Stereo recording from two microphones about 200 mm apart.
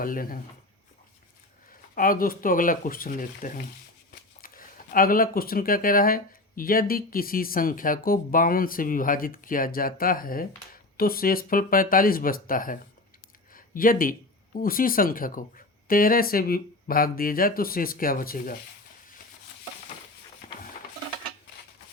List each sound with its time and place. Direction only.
0.0 s speech: 45° left (ahead or behind)
2.0 s speech: 45° left (ahead or behind)